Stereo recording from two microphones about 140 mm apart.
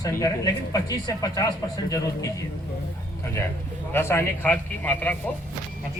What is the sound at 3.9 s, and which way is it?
A man's voice, 15° left (ahead or behind).